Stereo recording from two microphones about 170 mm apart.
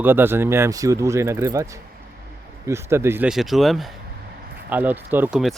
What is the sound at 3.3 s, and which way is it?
Speech, centre (ahead or behind).